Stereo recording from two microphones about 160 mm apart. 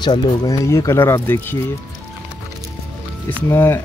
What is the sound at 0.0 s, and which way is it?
Speech, 25° left (ahead or behind).